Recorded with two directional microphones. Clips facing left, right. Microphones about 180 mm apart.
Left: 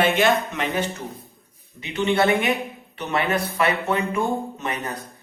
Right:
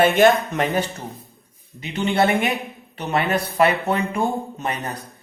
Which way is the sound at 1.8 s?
35° right (ahead or behind).